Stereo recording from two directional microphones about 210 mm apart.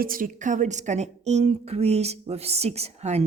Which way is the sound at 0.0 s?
40° right (ahead or behind).